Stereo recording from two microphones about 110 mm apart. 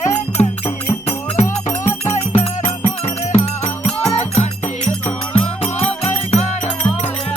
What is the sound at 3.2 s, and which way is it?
Music, 90° left.